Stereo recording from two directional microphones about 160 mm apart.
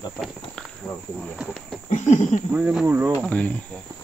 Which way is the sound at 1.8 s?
45° left (ahead or behind).